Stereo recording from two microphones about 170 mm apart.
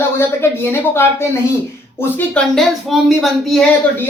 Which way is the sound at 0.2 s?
15° left (ahead or behind).